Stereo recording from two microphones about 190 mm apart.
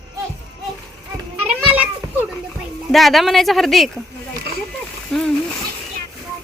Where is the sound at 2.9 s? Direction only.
Centre (ahead or behind).